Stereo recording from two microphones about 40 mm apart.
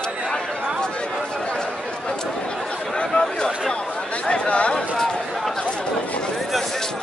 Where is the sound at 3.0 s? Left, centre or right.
Left.